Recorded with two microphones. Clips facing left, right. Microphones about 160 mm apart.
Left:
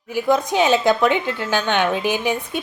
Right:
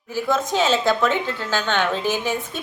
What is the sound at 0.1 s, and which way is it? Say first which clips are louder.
A woman's voice: left 3 dB; 15° left (ahead or behind).